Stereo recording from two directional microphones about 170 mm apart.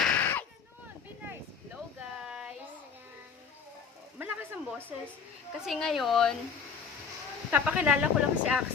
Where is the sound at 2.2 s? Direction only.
5° right (ahead or behind).